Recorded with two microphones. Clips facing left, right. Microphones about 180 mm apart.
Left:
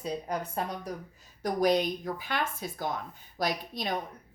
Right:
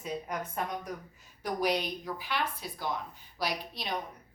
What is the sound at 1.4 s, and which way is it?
A woman's voice, 45° left (ahead or behind).